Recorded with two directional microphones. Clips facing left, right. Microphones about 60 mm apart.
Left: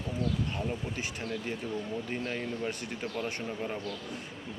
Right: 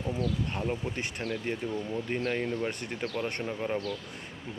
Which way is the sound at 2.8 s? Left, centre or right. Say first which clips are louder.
Right 3 dB; right.